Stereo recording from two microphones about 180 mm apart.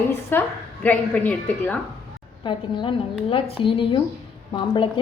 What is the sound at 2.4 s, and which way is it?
A woman's voice, 25° left (ahead or behind).